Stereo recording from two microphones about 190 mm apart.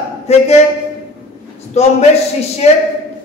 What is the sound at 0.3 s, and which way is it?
Speech, 35° left (ahead or behind).